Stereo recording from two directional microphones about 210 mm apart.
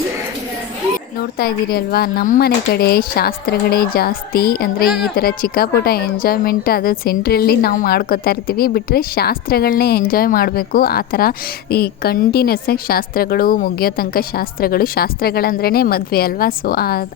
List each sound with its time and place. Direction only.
1.2 s a woman's voice: 45° left (ahead or behind)